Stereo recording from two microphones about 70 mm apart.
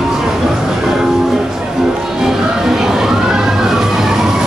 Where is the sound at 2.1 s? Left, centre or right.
Centre.